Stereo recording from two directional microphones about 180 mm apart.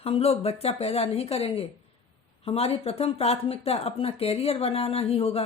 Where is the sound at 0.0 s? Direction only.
35° left (ahead or behind).